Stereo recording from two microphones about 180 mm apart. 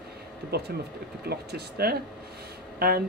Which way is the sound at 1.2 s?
60° right (ahead or behind).